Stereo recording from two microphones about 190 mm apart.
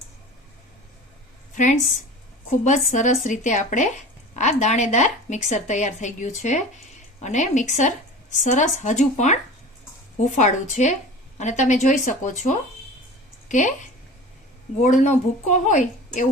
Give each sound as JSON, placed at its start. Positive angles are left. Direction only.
{"t": 1.5, "sound": "speech", "side_deg": 40}
{"t": 14.8, "sound": "speech", "side_deg": 40}